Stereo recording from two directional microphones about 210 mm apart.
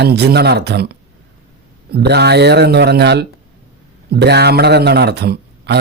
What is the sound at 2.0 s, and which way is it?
Speech, 50° right (ahead or behind).